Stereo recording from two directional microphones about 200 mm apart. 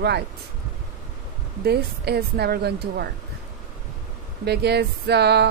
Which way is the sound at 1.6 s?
55° right (ahead or behind).